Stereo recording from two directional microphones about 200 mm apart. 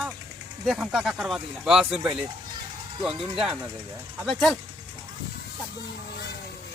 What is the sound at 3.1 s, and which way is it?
Speech, 25° right (ahead or behind).